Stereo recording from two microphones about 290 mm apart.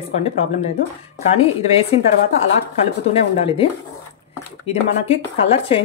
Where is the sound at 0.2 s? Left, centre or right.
Left.